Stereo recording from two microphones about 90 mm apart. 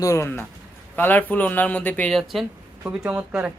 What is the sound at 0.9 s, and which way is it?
Speech, 20° left (ahead or behind).